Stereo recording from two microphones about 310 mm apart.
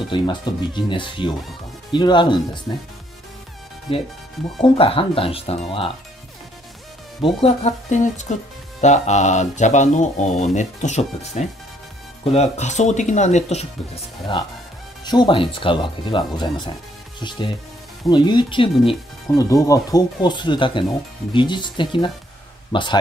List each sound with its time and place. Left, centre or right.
0.1 s speech: centre
3.9 s speech: centre
7.4 s speech: left
15.0 s speech: centre
18.0 s speech: centre